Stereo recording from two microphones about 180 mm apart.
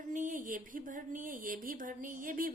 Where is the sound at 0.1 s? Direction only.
45° right (ahead or behind).